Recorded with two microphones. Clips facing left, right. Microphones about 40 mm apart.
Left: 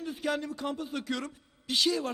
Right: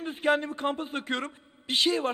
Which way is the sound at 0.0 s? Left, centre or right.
Right.